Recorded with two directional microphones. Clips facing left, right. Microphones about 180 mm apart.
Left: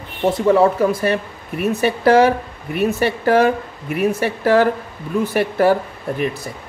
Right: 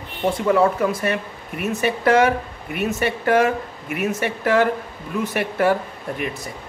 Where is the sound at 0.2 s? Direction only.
30° left (ahead or behind).